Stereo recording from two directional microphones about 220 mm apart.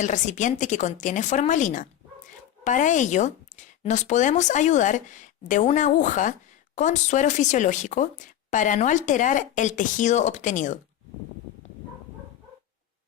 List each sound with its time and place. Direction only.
0.0 s speech: 35° left (ahead or behind)